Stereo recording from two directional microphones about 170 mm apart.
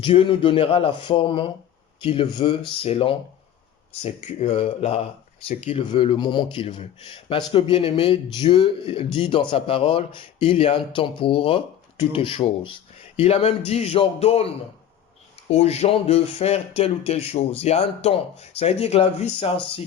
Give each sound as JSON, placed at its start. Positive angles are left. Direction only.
{"t": 0.0, "sound": "speech", "side_deg": 30}